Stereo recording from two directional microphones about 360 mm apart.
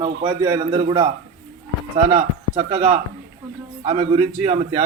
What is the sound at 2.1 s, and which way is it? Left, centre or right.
Speech, centre.